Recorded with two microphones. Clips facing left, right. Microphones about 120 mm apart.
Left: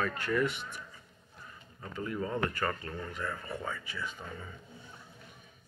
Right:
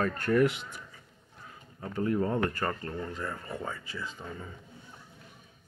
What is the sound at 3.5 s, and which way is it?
Speech, 25° right (ahead or behind).